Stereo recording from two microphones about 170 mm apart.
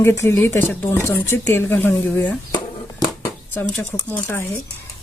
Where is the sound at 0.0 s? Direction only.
15° left (ahead or behind).